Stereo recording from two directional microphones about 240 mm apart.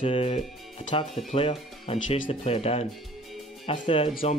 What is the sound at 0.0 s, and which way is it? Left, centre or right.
Speech, left.